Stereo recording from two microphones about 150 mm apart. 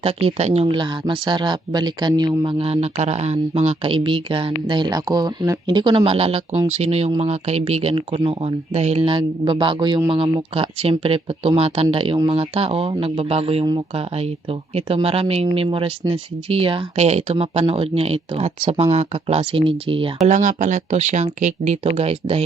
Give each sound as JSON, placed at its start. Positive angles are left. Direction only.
{"t": 0.0, "sound": "speech", "side_deg": -40}
{"t": 20.2, "sound": "speech", "side_deg": -55}